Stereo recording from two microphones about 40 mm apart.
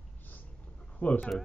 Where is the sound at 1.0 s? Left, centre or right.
Left.